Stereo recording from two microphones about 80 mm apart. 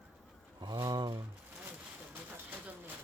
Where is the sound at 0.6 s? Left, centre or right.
Right.